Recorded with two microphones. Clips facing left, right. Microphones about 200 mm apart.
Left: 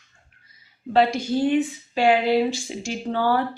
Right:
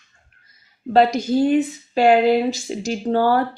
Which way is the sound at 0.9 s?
40° right (ahead or behind).